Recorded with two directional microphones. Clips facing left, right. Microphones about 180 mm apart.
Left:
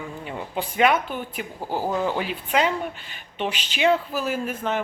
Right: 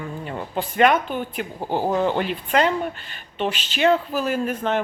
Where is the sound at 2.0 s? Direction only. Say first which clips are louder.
Right 3 dB; 5° left (ahead or behind).